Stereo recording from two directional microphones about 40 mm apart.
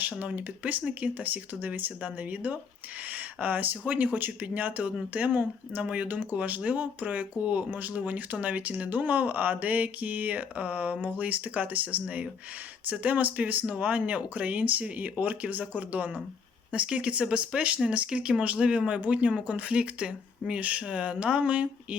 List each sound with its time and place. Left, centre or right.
0.0 s speech: right
12.9 s speech: right